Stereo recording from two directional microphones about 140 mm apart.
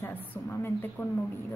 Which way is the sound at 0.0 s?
15° left (ahead or behind).